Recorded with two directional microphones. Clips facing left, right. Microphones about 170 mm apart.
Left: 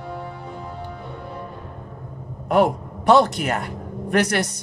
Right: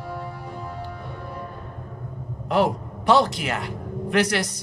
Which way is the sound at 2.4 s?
55° left (ahead or behind).